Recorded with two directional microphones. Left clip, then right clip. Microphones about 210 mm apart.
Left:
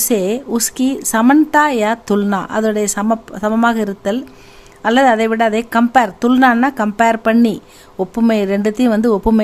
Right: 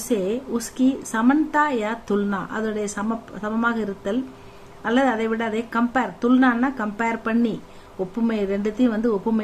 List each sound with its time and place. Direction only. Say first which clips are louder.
0.1 s a woman's voice: left 5 dB; 55° left (ahead or behind)